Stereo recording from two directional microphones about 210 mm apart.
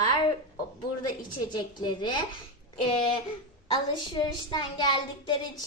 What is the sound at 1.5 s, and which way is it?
Speech, 20° left (ahead or behind).